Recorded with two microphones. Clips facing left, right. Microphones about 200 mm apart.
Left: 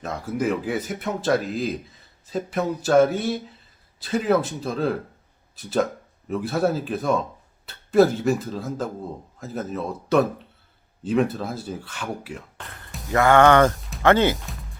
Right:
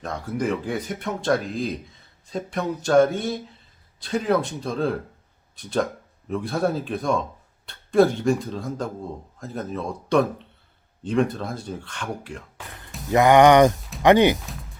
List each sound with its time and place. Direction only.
0.0 s speech: 5° left (ahead or behind)
12.6 s speech: 5° right (ahead or behind)
13.7 s music: centre (ahead or behind)
14.0 s speech: 15° right (ahead or behind)
14.3 s speech: centre (ahead or behind)